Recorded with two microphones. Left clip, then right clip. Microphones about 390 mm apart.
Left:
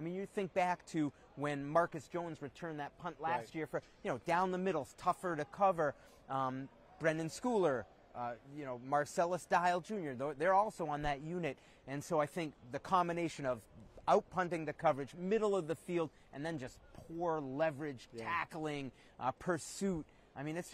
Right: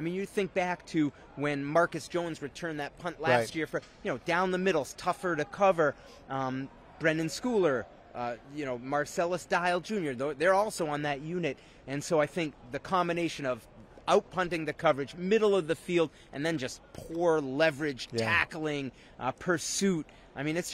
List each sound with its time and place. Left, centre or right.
0.0 s speech: centre
10.2 s speech: left